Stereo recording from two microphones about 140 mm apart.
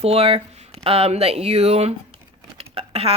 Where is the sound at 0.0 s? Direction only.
45° right (ahead or behind).